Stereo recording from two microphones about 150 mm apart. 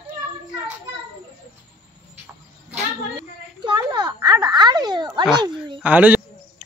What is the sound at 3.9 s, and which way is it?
A child's voice, 25° right (ahead or behind).